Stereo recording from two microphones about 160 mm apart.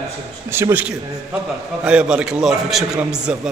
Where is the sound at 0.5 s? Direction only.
15° right (ahead or behind).